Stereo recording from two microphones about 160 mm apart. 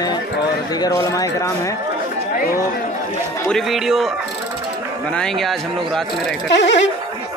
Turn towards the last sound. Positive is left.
turn(degrees=90)